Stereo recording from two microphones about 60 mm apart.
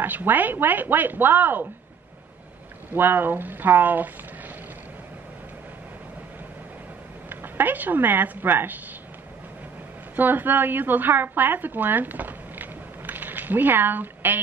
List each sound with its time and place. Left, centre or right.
0.0 s speech: right
2.9 s speech: right
7.2 s speech: right
10.1 s a woman's voice: right